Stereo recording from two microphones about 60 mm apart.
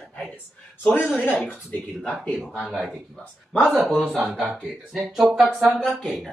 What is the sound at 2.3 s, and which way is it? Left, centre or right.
Speech, centre.